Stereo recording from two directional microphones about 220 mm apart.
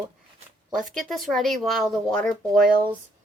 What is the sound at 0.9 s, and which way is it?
Speech, centre (ahead or behind).